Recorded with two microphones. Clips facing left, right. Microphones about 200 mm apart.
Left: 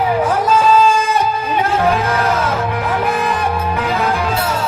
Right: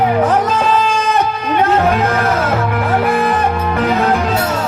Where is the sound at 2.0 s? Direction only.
50° right (ahead or behind).